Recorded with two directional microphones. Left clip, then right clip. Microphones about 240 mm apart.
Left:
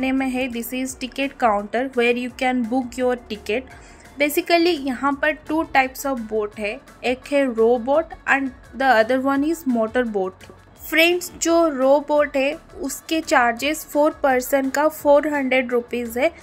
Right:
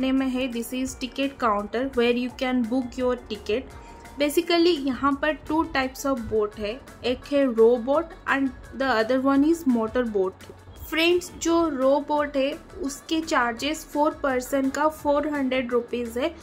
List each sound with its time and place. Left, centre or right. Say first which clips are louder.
0.0 s speech: left 3 dB; centre